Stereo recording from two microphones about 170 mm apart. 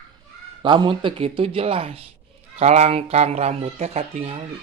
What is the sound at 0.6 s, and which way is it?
Speech, 30° right (ahead or behind).